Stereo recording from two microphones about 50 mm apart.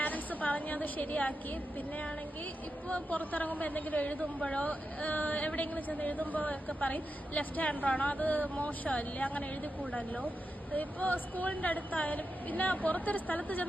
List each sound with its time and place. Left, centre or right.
0.0 s a sound: left
2.9 s a woman's voice: left
10.8 s a woman's voice: left